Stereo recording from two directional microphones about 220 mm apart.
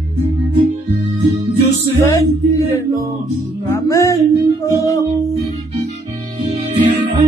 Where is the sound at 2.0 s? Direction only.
15° left (ahead or behind).